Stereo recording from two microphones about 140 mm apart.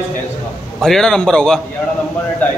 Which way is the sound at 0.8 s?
5° left (ahead or behind).